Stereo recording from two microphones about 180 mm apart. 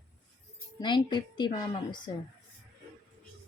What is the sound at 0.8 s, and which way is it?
Speech, 25° left (ahead or behind).